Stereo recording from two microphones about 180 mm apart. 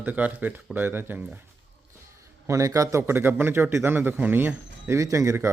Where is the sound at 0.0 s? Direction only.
10° right (ahead or behind).